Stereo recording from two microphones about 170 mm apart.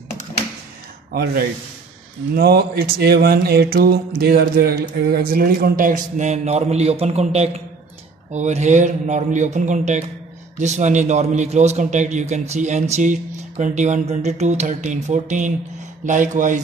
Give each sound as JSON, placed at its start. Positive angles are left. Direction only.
{"t": 1.1, "sound": "a man's voice", "side_deg": -65}